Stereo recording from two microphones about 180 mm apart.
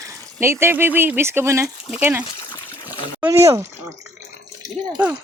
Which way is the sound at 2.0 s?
10° right (ahead or behind).